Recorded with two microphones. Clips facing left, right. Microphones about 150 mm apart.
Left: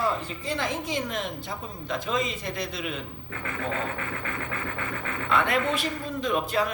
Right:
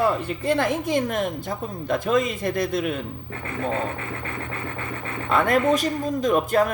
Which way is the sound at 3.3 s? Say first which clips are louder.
Right 4 dB; 35° right (ahead or behind).